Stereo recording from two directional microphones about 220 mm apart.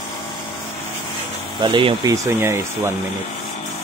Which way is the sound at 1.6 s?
20° right (ahead or behind).